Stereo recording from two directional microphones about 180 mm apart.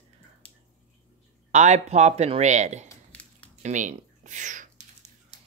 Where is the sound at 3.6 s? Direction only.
45° right (ahead or behind).